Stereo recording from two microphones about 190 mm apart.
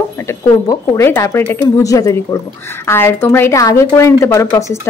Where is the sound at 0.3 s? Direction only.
15° left (ahead or behind).